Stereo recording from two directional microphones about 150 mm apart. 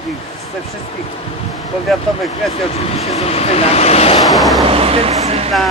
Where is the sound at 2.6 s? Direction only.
45° left (ahead or behind).